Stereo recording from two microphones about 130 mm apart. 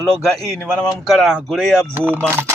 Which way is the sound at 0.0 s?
5° left (ahead or behind).